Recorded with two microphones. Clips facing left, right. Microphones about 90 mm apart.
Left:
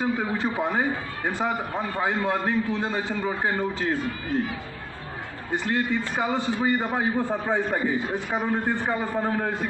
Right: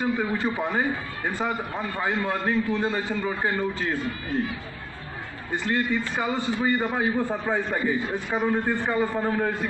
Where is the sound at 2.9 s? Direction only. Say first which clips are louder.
Even; 20° left (ahead or behind).